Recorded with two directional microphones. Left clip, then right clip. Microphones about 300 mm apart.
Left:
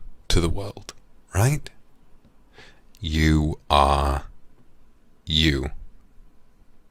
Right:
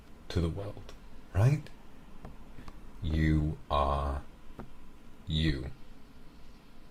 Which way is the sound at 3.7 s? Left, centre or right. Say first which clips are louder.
Left 12 dB; left.